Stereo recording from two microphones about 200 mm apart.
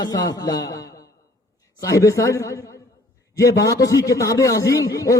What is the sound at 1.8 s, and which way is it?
A man's voice, 15° left (ahead or behind).